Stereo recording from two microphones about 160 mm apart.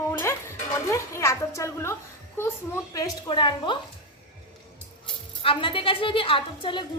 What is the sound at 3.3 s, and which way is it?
Speech, 30° left (ahead or behind).